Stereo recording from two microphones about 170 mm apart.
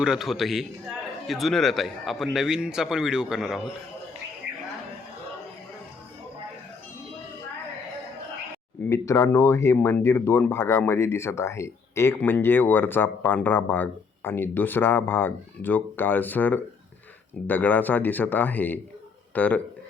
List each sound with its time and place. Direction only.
0.0 s a man's voice: centre (ahead or behind)
8.9 s speech: 15° left (ahead or behind)